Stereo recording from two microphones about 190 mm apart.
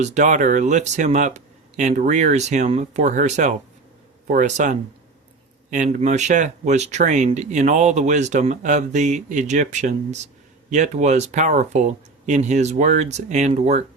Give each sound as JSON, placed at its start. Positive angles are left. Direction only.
{"t": 0.0, "sound": "speech", "side_deg": -40}